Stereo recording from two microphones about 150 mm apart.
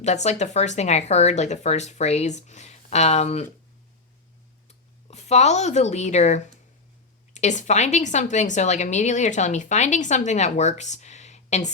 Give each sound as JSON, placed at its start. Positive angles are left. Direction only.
{"t": 0.0, "sound": "a woman's voice", "side_deg": 50}
{"t": 4.7, "sound": "a woman's voice", "side_deg": 45}